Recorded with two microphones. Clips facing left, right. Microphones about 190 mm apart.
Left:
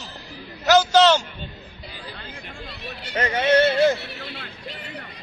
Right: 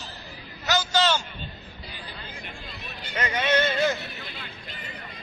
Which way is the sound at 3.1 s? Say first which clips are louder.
Left 6 dB; 30° left (ahead or behind).